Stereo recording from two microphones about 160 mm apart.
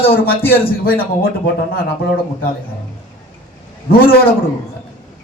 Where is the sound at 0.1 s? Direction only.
70° left (ahead or behind).